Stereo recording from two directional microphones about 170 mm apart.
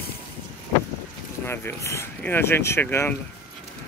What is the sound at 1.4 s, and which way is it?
Speech, 15° left (ahead or behind).